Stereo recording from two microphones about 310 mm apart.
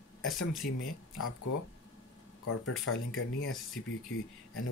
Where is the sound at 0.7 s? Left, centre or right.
Left.